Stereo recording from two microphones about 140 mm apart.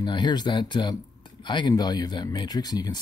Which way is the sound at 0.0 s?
30° left (ahead or behind).